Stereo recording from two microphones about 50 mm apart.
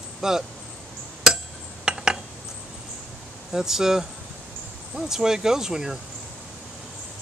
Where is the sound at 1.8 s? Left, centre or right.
Centre.